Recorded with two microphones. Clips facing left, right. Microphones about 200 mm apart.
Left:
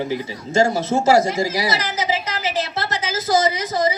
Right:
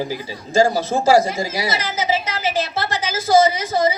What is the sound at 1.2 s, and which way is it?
Speech, 30° left (ahead or behind).